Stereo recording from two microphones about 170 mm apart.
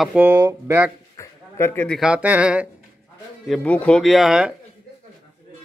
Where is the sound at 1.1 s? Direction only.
15° left (ahead or behind).